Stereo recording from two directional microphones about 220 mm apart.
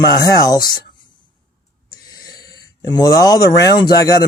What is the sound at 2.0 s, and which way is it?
Speech, 15° left (ahead or behind).